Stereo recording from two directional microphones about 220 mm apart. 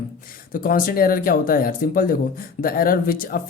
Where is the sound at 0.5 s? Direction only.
40° left (ahead or behind).